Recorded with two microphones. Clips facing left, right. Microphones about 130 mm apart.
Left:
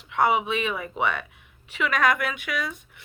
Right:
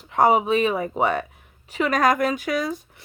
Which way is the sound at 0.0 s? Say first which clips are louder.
Right 4 dB; 40° right (ahead or behind).